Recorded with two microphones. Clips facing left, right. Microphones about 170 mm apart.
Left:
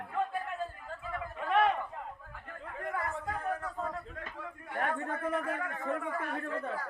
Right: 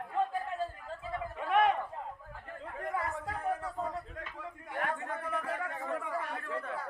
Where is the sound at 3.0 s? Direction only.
10° right (ahead or behind).